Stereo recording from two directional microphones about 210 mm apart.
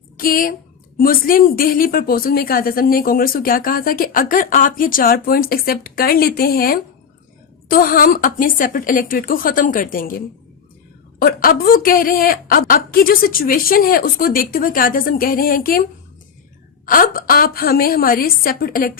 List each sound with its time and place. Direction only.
0.2 s a woman's voice: 40° left (ahead or behind)
16.8 s speech: 40° left (ahead or behind)